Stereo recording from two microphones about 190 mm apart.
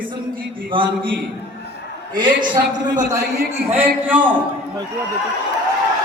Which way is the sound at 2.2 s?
25° right (ahead or behind).